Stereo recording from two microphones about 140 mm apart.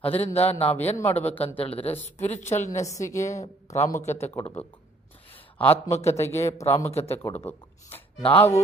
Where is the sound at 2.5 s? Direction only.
55° left (ahead or behind).